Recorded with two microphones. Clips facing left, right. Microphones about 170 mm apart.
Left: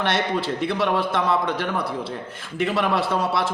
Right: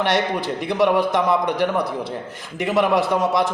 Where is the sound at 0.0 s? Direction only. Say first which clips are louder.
Right 2 dB; 15° right (ahead or behind).